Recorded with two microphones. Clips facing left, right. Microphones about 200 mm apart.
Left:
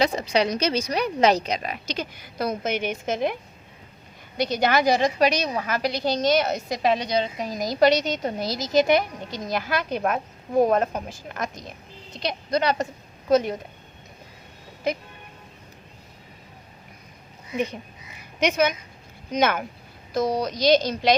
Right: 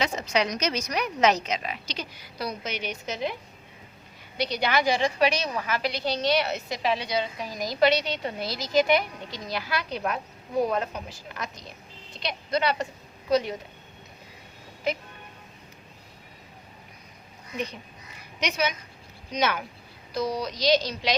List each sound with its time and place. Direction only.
0.0 s a woman's voice: 35° left (ahead or behind); by 3.3 s 50° left (ahead or behind)
4.4 s a woman's voice: 45° left (ahead or behind)
18.3 s a woman's voice: 50° left (ahead or behind)